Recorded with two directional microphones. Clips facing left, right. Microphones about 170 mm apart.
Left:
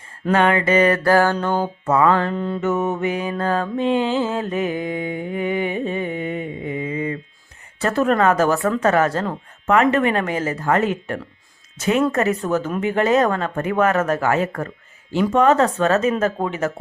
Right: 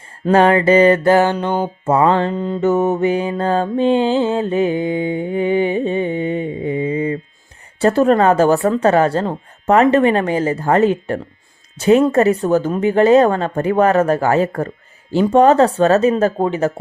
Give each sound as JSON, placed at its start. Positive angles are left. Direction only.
{"t": 0.3, "sound": "music", "side_deg": -35}
{"t": 2.6, "sound": "music", "side_deg": -35}
{"t": 7.8, "sound": "a woman's voice", "side_deg": -30}